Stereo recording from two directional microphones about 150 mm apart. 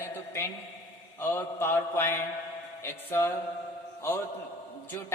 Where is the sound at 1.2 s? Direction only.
15° left (ahead or behind).